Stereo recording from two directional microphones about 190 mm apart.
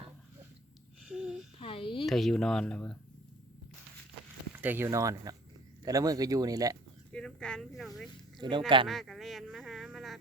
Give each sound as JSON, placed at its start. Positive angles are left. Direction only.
{"t": 1.0, "sound": "a sound", "side_deg": -5}
{"t": 1.5, "sound": "a sound", "side_deg": 30}
{"t": 2.0, "sound": "speech", "side_deg": 0}
{"t": 4.5, "sound": "speech", "side_deg": -10}
{"t": 7.1, "sound": "speech", "side_deg": 5}
{"t": 8.4, "sound": "speech", "side_deg": -25}
{"t": 8.9, "sound": "speech", "side_deg": 0}